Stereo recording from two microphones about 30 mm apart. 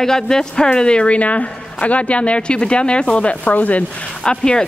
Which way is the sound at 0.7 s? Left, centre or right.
Left.